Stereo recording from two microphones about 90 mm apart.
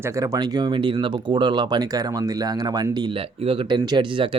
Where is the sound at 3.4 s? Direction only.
65° right (ahead or behind).